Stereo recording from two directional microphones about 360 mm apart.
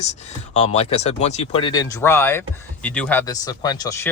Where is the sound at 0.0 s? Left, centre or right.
Centre.